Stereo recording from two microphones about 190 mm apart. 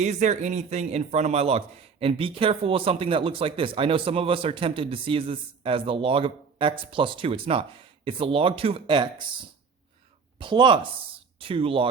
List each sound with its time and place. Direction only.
0.0 s speech: 40° right (ahead or behind)
10.3 s speech: 25° right (ahead or behind)